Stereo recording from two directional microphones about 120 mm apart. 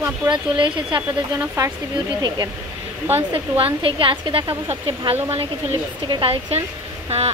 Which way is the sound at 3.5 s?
50° right (ahead or behind).